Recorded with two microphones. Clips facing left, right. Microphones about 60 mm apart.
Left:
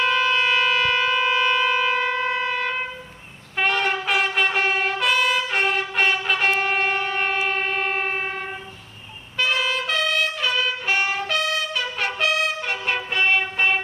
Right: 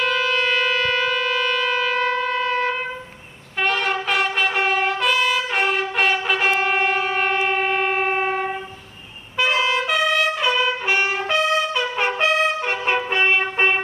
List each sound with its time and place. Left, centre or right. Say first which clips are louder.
0.0 s shofar: even; centre
2.6 s a sound: right 3 dB; centre
3.6 s trumpet: right 1 dB; centre
6.2 s wind instrument: right 2 dB; centre
7.4 s train: right 3 dB; centre
9.5 s trumpet: right 4 dB; right
13.4 s music: right 2 dB; right